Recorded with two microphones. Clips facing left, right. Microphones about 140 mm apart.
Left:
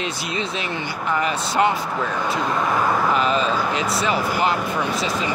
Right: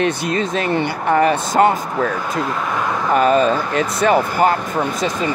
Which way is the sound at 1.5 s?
45° right (ahead or behind).